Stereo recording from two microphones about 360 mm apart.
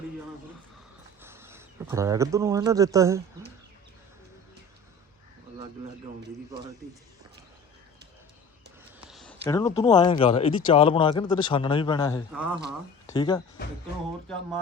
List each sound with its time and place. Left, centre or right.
1.2 s a man's voice: centre
9.0 s speech: centre
12.3 s speech: centre
13.1 s speech: centre